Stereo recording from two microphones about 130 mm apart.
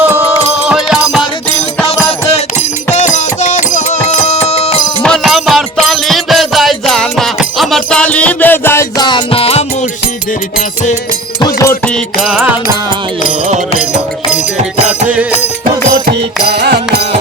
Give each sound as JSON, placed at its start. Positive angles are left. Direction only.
{"t": 0.0, "sound": "music", "side_deg": -10}
{"t": 2.9, "sound": "music", "side_deg": 65}
{"t": 4.4, "sound": "music", "side_deg": 55}
{"t": 5.0, "sound": "music", "side_deg": 0}
{"t": 9.0, "sound": "music", "side_deg": 35}
{"t": 11.3, "sound": "music", "side_deg": 30}
{"t": 12.2, "sound": "music", "side_deg": -10}